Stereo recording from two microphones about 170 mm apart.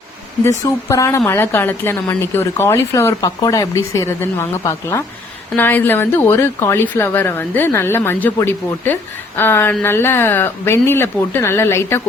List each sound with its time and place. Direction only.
0.6 s speech: 15° left (ahead or behind)